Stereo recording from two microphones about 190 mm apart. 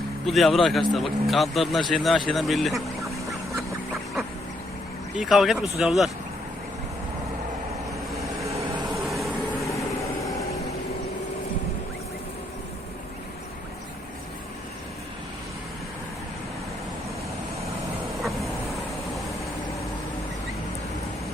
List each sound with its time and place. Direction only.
0.3 s speech: centre (ahead or behind)
5.1 s speech: centre (ahead or behind)
8.4 s vehicle: 15° right (ahead or behind)
8.9 s vehicle: centre (ahead or behind)